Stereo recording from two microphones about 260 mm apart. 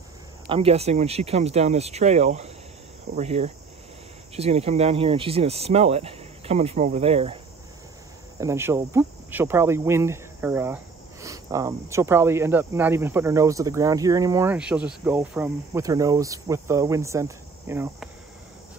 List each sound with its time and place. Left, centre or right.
0.5 s speech: right
8.4 s speech: centre